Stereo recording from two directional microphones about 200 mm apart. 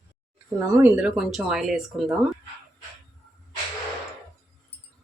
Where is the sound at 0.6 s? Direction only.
10° right (ahead or behind).